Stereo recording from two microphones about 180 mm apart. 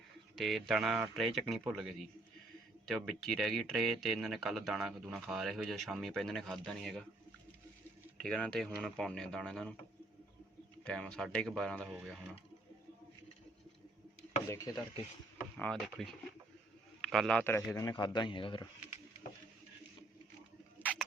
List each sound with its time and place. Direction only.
0.3 s speech: centre (ahead or behind)
8.2 s speech: 5° left (ahead or behind)
10.8 s speech: 5° left (ahead or behind)
11.9 s speech: 5° right (ahead or behind)
14.4 s stir: 15° left (ahead or behind)
15.5 s a man's voice: 5° left (ahead or behind); by 18.7 s 25° left (ahead or behind)